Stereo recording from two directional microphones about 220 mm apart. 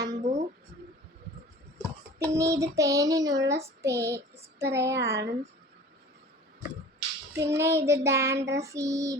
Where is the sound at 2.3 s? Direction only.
15° right (ahead or behind).